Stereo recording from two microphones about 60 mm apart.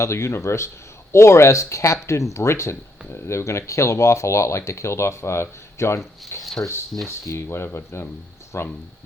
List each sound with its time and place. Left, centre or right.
0.0 s speech: left
6.4 s speech: centre
7.4 s speech: left